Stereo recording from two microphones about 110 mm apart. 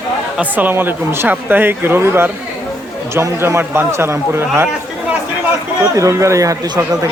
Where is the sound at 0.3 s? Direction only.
15° right (ahead or behind).